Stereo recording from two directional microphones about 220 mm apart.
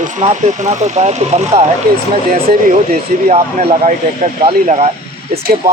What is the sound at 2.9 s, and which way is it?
Speech, 30° right (ahead or behind).